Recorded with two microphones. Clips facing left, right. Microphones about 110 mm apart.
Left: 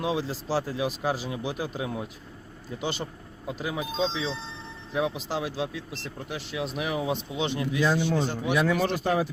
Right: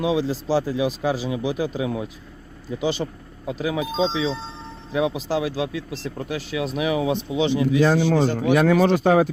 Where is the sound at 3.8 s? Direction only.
90° right.